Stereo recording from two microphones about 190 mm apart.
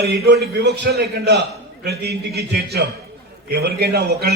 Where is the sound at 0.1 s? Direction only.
60° right (ahead or behind).